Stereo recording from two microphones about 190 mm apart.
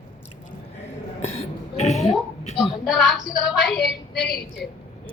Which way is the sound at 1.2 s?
35° left (ahead or behind).